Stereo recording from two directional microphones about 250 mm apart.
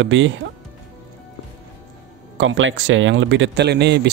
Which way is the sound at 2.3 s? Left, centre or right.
Right.